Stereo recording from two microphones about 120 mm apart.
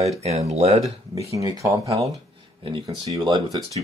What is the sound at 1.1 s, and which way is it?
Speech, 25° right (ahead or behind).